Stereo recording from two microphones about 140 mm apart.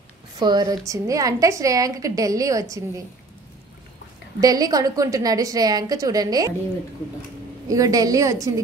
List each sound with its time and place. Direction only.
0.4 s a woman's voice: 30° right (ahead or behind)
4.4 s a woman's voice: 25° right (ahead or behind)
7.6 s a woman's voice: 25° right (ahead or behind)